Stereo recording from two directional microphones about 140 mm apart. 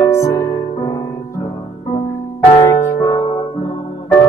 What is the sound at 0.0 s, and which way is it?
Music, 20° left (ahead or behind).